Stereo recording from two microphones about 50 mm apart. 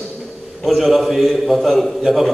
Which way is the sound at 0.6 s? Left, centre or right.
Centre.